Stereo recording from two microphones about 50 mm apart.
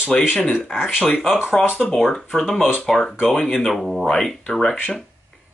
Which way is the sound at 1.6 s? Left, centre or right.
Centre.